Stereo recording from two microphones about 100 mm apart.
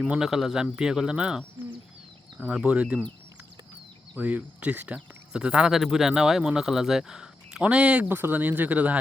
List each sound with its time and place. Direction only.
0.1 s speech: 5° right (ahead or behind)
2.4 s speech: 10° right (ahead or behind)
4.2 s speech: 15° right (ahead or behind)